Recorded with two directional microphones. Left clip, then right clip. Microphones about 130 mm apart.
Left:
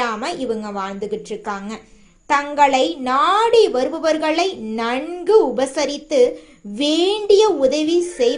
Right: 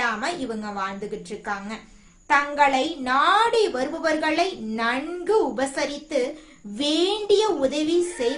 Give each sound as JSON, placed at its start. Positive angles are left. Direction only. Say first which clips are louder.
{"t": 0.0, "sound": "a woman's voice", "louder": "left 3 dB", "side_deg": 40}